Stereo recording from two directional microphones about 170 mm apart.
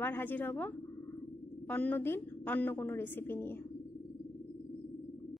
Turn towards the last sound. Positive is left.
turn(degrees=15)  # may be behind; listen again after turning